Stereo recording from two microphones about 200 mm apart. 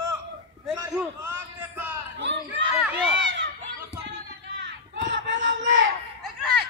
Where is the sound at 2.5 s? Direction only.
5° right (ahead or behind).